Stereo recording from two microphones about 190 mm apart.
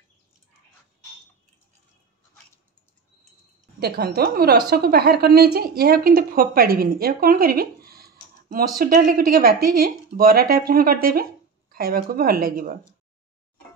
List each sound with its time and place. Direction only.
3.8 s a woman's voice: 55° right (ahead or behind)